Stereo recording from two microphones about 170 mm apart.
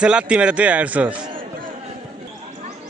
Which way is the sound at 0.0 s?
5° right (ahead or behind).